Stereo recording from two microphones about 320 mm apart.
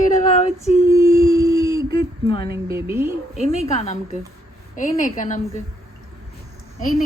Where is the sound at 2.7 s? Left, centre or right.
Centre.